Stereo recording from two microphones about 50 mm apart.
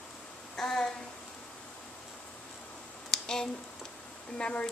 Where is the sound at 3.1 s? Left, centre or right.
Centre.